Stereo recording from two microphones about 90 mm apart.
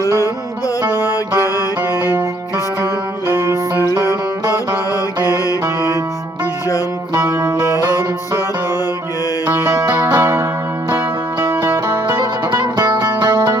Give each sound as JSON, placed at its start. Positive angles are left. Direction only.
{"t": 0.9, "sound": "mantra", "side_deg": 45}
{"t": 1.9, "sound": "music", "side_deg": -25}
{"t": 5.2, "sound": "music", "side_deg": 45}
{"t": 7.3, "sound": "music", "side_deg": -30}
{"t": 9.5, "sound": "music", "side_deg": -25}
{"t": 9.7, "sound": "music", "side_deg": -50}